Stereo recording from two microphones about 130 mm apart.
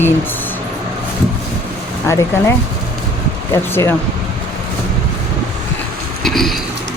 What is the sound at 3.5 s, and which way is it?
Speech, 20° left (ahead or behind).